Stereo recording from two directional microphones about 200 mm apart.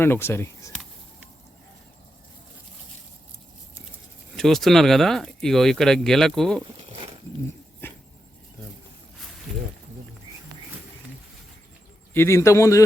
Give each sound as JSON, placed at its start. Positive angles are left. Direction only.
{"t": 0.0, "sound": "speech", "side_deg": 10}
{"t": 4.4, "sound": "speech", "side_deg": 0}
{"t": 6.7, "sound": "a sound", "side_deg": -25}
{"t": 7.8, "sound": "dog", "side_deg": 10}
{"t": 12.1, "sound": "speech", "side_deg": 15}